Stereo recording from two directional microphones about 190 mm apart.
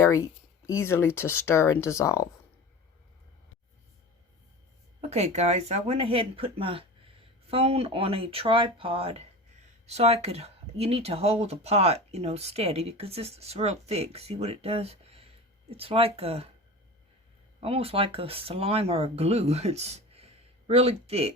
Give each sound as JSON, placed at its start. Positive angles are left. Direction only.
{"t": 0.0, "sound": "a sound", "side_deg": 15}
{"t": 0.8, "sound": "speech", "side_deg": 15}
{"t": 4.9, "sound": "speech", "side_deg": -35}
{"t": 17.6, "sound": "speech", "side_deg": -30}